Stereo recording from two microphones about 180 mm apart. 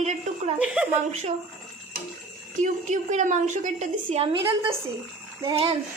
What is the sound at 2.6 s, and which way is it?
A woman's voice, 45° right (ahead or behind).